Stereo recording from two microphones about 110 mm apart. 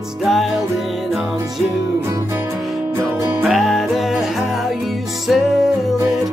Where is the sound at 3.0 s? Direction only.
25° right (ahead or behind).